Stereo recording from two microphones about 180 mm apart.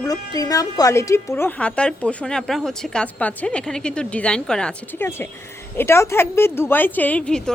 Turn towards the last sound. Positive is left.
turn(degrees=5)  # may be behind; listen again after turning